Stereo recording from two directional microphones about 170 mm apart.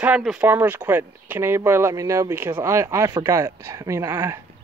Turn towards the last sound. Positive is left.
turn(degrees=-15)  # may be behind; listen again after turning